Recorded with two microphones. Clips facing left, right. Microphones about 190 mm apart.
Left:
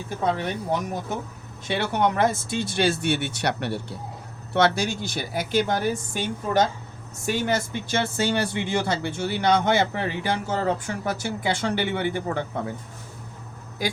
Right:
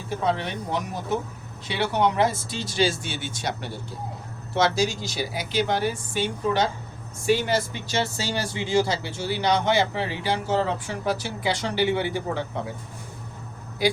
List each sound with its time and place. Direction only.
0.3 s speech: 45° left (ahead or behind)